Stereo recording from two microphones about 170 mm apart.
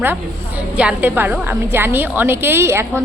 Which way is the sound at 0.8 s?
10° right (ahead or behind).